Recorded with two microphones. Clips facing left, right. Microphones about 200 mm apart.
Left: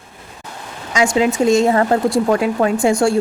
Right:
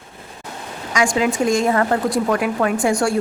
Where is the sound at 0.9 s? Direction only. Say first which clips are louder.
Left 3 dB; 25° left (ahead or behind).